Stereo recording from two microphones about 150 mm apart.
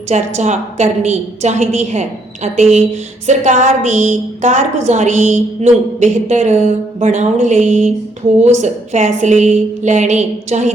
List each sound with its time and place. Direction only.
0.1 s a woman's voice: 50° right (ahead or behind)